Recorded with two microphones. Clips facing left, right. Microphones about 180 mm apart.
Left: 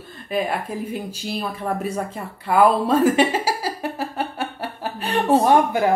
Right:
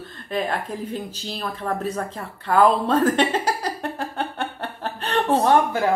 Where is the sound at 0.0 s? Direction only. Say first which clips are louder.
Left 2 dB; 10° left (ahead or behind).